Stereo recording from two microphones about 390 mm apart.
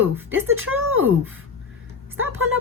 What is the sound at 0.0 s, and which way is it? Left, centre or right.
Speech, centre.